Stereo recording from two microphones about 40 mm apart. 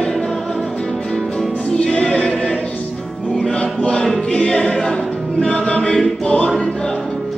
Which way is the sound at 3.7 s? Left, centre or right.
Left.